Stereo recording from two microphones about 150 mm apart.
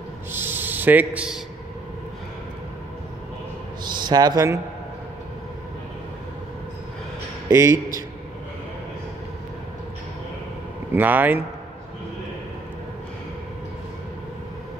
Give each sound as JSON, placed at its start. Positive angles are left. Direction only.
{"t": 0.3, "sound": "speech", "side_deg": -15}
{"t": 4.0, "sound": "speech", "side_deg": -30}
{"t": 7.5, "sound": "speech", "side_deg": -20}
{"t": 10.9, "sound": "speech", "side_deg": -10}